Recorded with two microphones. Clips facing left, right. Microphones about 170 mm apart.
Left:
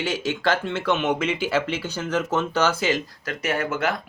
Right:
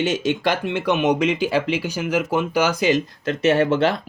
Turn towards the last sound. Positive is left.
turn(degrees=-30)  # may be behind; listen again after turning